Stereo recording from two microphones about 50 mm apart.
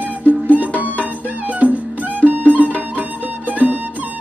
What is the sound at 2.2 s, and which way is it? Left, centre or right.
Music, right.